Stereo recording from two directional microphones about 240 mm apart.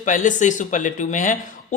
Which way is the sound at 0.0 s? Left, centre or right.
Left.